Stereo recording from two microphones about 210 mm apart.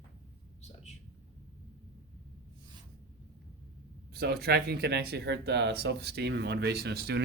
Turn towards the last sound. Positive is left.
turn(degrees=-50)  # may be behind; listen again after turning